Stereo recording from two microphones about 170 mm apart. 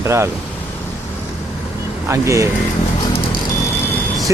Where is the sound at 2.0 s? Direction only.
15° right (ahead or behind).